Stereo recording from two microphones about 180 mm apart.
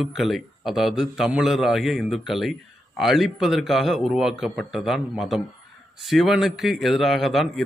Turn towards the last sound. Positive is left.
turn(degrees=0)  # may be behind; listen again after turning